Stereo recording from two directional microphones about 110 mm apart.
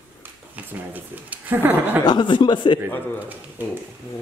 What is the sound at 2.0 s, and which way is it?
Speech, 45° left (ahead or behind).